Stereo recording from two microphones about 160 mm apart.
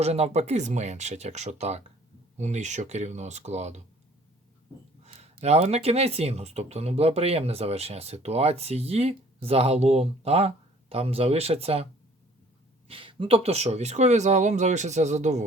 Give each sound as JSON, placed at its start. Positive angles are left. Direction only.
{"t": 0.0, "sound": "speech", "side_deg": -40}
{"t": 5.0, "sound": "speech", "side_deg": -40}
{"t": 12.9, "sound": "speech", "side_deg": -35}